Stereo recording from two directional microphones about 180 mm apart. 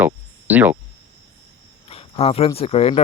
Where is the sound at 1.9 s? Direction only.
30° left (ahead or behind).